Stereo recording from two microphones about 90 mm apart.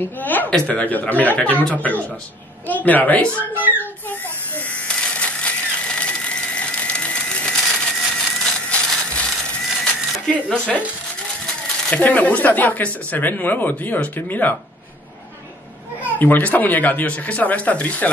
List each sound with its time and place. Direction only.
0.2 s a sound: 20° left (ahead or behind)
0.7 s speech: 15° left (ahead or behind)
3.3 s speech: 20° right (ahead or behind)
4.7 s a sound: 10° left (ahead or behind)
8.6 s wood: 15° left (ahead or behind)
10.1 s speech: 10° left (ahead or behind)
11.9 s speech: 15° left (ahead or behind)
16.2 s speech: 20° left (ahead or behind)